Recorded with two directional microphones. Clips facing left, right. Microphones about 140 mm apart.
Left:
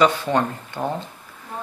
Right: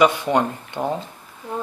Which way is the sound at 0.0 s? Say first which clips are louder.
Right 1 dB; 15° right (ahead or behind).